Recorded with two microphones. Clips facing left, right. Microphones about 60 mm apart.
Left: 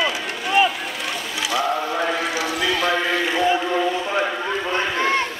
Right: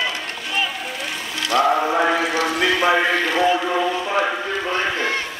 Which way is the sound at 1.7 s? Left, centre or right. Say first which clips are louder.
Right 4 dB; right.